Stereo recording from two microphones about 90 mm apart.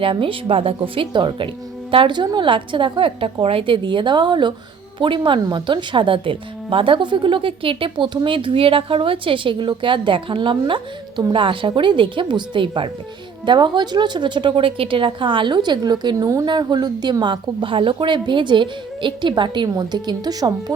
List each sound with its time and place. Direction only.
0.0 s speech: 80° right
13.4 s speech: 60° right (ahead or behind)
16.1 s speech: 40° right (ahead or behind)
16.5 s speech: 55° right (ahead or behind)
19.6 s a woman's voice: 45° right (ahead or behind)